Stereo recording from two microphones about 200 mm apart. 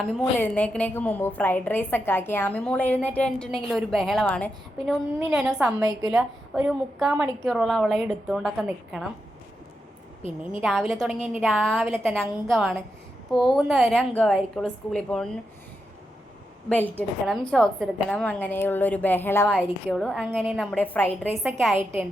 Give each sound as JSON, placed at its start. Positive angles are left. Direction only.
{"t": 0.0, "sound": "a woman's voice", "side_deg": 5}
{"t": 5.8, "sound": "a woman's voice", "side_deg": -20}
{"t": 6.1, "sound": "a woman's voice", "side_deg": 0}
{"t": 10.5, "sound": "a woman's voice", "side_deg": 0}
{"t": 16.6, "sound": "a woman's voice", "side_deg": 5}